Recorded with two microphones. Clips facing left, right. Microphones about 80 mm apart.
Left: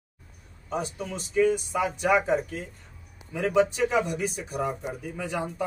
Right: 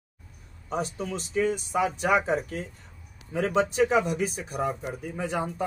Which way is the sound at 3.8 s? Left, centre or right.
Right.